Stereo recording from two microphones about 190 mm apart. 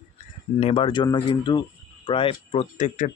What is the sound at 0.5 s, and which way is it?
Speech, 30° left (ahead or behind).